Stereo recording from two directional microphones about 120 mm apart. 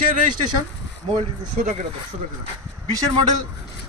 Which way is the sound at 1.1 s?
65° right (ahead or behind).